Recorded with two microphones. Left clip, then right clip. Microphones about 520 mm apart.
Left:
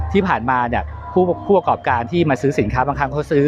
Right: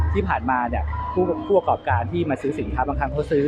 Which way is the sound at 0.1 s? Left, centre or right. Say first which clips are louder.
Left 5 dB; left.